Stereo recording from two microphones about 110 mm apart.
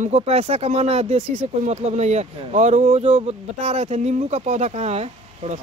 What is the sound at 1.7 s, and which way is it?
Speech, 85° right.